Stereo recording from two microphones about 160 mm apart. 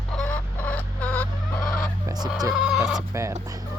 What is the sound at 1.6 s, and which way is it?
Fowl, 60° left (ahead or behind).